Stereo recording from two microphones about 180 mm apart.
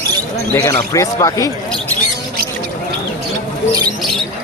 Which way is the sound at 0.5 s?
15° left (ahead or behind).